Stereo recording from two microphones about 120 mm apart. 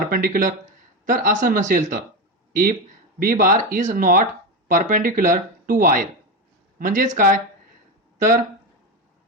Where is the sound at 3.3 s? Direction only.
90° right.